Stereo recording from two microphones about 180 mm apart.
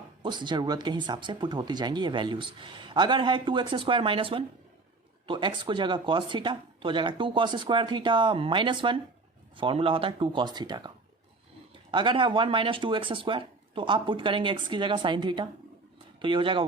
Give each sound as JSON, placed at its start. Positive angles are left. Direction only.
{"t": 0.2, "sound": "speech", "side_deg": -25}